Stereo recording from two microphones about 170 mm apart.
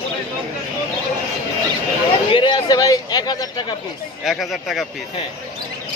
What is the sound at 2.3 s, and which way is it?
A man's voice, 25° left (ahead or behind).